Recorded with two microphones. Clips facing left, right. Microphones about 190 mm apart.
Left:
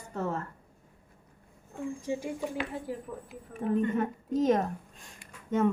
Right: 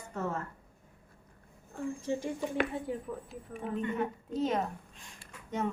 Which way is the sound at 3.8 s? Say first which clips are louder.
Left 4 dB; 45° left (ahead or behind).